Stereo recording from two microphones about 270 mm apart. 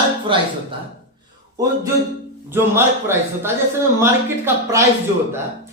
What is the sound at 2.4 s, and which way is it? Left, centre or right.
Speech, centre.